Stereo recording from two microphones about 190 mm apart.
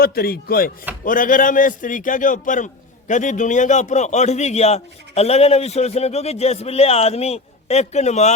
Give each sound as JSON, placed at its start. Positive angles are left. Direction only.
{"t": 0.0, "sound": "a man's voice", "side_deg": 55}